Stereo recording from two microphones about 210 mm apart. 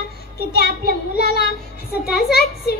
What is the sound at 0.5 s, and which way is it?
Child singing, 50° left (ahead or behind).